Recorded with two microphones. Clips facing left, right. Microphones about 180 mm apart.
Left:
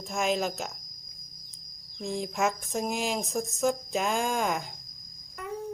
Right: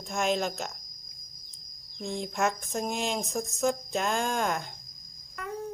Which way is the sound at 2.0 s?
5° left (ahead or behind).